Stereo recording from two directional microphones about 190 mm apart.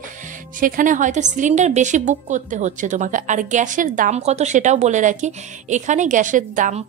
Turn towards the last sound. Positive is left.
turn(degrees=-45)  # may be behind; listen again after turning